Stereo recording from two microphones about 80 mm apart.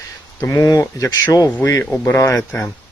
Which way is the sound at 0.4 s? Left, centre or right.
Left.